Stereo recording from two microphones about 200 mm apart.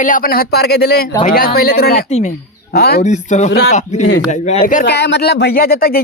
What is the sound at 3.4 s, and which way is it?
Speech, 55° left (ahead or behind).